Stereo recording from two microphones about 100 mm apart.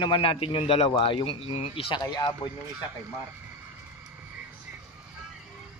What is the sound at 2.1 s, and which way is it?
Speech, 50° left (ahead or behind).